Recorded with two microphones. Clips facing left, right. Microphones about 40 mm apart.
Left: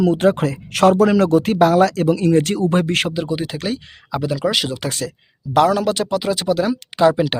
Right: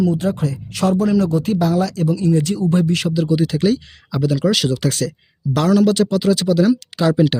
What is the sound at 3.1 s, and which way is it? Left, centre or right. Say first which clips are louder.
Speech: right 5 dB; left.